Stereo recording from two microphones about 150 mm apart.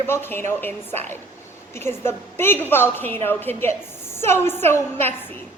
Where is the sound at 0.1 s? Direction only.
15° left (ahead or behind).